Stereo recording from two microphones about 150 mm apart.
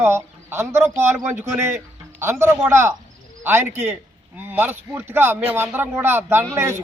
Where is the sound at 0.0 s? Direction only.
15° right (ahead or behind).